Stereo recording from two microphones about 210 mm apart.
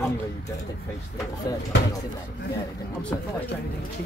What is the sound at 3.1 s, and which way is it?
Speech, 10° left (ahead or behind).